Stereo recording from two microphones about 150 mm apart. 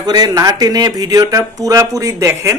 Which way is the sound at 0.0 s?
25° right (ahead or behind).